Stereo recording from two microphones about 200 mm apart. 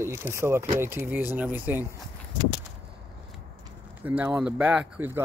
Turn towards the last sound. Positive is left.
turn(degrees=-5)  # may be behind; listen again after turning